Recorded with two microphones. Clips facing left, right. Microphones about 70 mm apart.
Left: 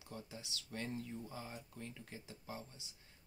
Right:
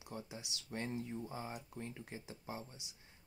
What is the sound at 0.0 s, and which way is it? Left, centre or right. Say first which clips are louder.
Speech: right 3 dB; centre.